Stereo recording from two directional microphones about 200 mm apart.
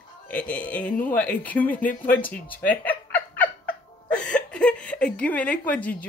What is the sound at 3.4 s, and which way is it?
Cat, 5° left (ahead or behind).